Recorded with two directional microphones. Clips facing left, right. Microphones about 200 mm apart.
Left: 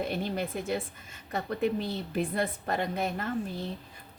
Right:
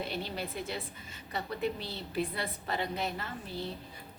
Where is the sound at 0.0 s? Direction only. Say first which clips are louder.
Left 5 dB; 50° left (ahead or behind).